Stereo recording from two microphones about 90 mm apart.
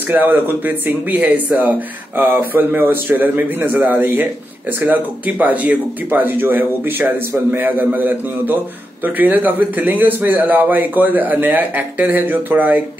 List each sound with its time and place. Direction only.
0.1 s speech: 20° right (ahead or behind)